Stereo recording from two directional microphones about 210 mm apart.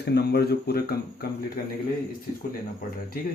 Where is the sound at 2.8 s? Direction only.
40° left (ahead or behind).